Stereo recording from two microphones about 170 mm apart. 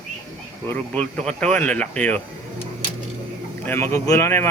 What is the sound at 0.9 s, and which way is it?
Speech, 5° left (ahead or behind).